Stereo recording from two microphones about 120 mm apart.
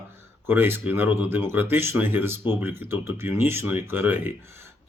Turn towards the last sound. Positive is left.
turn(degrees=-15)  # may be behind; listen again after turning